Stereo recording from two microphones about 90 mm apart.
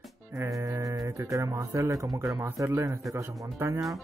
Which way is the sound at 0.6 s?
40° right (ahead or behind).